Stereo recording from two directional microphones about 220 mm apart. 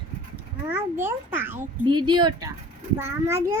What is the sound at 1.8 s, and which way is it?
A child's voice, 20° right (ahead or behind).